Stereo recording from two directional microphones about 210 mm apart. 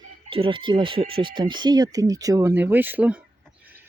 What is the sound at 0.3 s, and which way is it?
Speech, 25° right (ahead or behind).